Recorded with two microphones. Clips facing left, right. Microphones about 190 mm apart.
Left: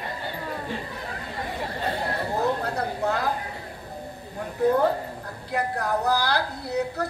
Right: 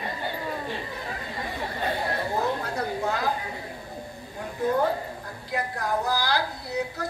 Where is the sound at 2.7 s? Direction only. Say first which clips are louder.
Left 2 dB; 60° left (ahead or behind).